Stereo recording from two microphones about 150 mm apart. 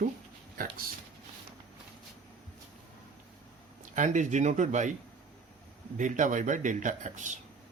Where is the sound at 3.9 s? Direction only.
55° right (ahead or behind).